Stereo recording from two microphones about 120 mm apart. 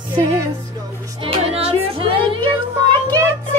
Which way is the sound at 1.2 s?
50° right (ahead or behind).